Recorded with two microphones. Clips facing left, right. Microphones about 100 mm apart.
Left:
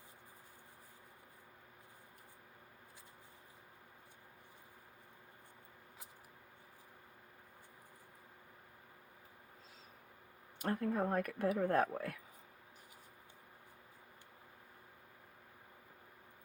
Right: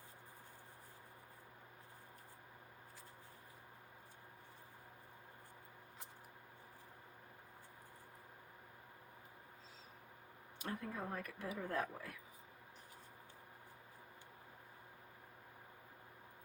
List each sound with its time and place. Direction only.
10.6 s speech: 50° left (ahead or behind)